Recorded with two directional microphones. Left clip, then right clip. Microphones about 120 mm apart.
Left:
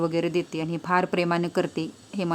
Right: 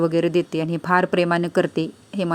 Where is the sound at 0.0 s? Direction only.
25° right (ahead or behind).